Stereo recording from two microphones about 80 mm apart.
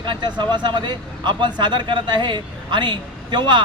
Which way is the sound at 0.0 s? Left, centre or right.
Right.